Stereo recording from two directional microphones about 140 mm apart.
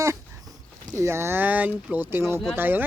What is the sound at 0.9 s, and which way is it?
Speech, 20° right (ahead or behind).